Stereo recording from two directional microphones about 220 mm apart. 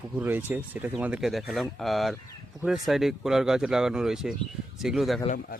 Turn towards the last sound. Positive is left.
turn(degrees=40)  # may be behind; listen again after turning